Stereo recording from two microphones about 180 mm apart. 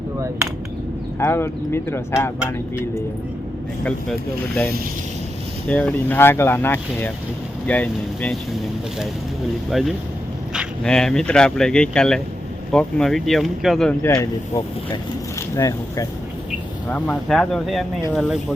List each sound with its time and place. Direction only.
1.2 s speech: 15° left (ahead or behind)
5.6 s speech: 10° left (ahead or behind)
9.6 s speech: centre (ahead or behind)
14.0 s speech: 15° left (ahead or behind)
16.9 s speech: 5° left (ahead or behind)